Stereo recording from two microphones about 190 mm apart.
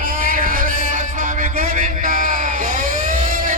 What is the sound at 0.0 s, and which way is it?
Music, 45° right (ahead or behind).